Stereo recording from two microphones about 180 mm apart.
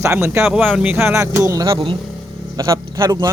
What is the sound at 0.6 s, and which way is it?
Speech, centre (ahead or behind).